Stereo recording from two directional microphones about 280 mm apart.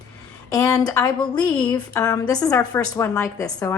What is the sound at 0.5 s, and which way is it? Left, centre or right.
A woman's voice, centre.